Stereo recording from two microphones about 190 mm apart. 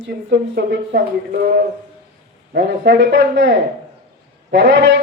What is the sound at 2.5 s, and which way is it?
A man's voice, 65° right (ahead or behind).